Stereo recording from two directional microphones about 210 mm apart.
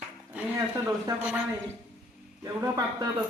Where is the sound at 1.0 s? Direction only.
5° right (ahead or behind).